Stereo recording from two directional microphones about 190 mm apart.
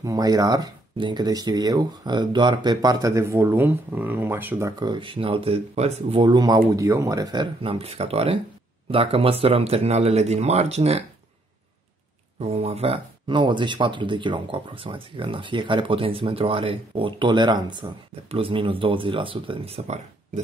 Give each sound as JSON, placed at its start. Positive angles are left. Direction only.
{"t": 0.0, "sound": "speech", "side_deg": -20}
{"t": 12.4, "sound": "speech", "side_deg": -30}